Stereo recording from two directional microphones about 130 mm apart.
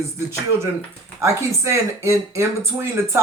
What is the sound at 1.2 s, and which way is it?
Speech, 20° right (ahead or behind).